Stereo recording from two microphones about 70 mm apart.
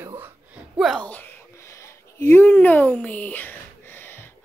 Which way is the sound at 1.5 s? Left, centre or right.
Left.